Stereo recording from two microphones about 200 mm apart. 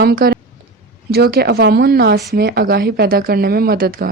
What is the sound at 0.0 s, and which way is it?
Speech, 50° right (ahead or behind).